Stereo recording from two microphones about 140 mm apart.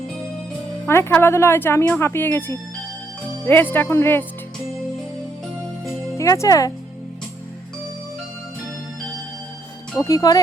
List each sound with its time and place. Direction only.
0.9 s speech: 15° left (ahead or behind)
6.1 s speech: 20° left (ahead or behind)
10.0 s speech: 25° left (ahead or behind)